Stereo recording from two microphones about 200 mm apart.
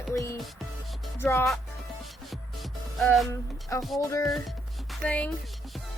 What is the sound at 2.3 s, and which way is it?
Music, centre (ahead or behind).